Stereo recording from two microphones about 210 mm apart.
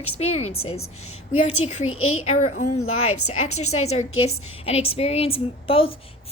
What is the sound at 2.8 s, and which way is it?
A woman's voice, 80° left.